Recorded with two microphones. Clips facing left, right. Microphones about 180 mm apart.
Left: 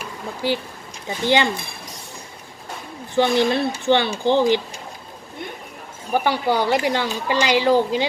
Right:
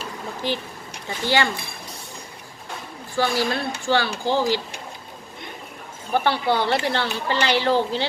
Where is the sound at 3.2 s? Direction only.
20° left (ahead or behind).